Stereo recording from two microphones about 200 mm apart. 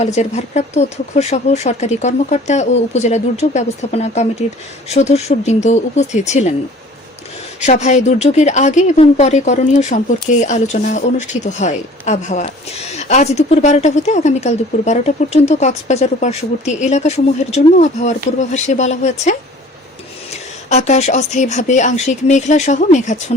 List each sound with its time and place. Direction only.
0.0 s speech: 35° left (ahead or behind)
7.6 s speech: 35° left (ahead or behind)
20.7 s speech: 35° left (ahead or behind)